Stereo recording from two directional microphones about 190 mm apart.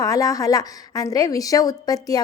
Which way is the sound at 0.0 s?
20° left (ahead or behind).